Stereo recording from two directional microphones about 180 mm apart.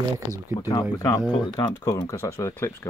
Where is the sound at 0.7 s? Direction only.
20° left (ahead or behind).